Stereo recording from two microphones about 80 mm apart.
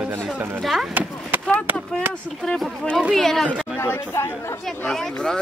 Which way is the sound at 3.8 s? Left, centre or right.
Left.